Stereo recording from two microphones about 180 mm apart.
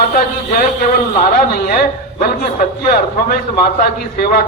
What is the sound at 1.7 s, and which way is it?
A man's voice, 50° left (ahead or behind).